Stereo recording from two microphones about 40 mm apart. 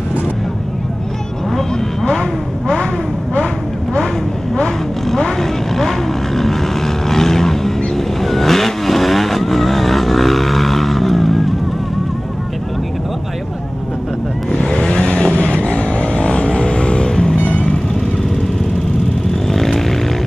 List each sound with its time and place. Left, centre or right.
5.4 s vehicle: centre
14.6 s vehicle: centre
17.1 s music: centre
19.4 s vehicle: centre